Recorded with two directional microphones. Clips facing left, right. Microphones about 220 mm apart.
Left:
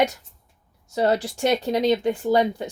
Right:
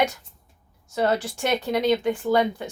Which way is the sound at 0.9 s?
35° left (ahead or behind).